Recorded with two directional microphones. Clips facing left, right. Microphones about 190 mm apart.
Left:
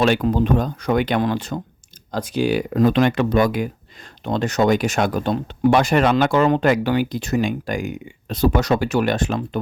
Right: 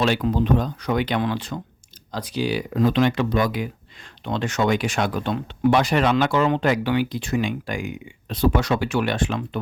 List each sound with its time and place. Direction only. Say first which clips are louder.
0.0 s speech: left 3 dB; 50° left (ahead or behind)